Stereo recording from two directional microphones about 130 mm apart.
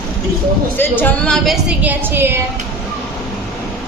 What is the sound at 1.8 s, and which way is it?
Speech, 15° right (ahead or behind).